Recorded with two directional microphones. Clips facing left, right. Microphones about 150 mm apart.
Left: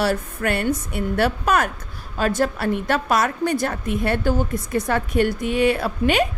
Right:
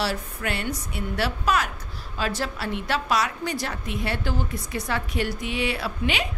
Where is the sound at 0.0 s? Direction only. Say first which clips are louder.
Left 6 dB; 50° left (ahead or behind).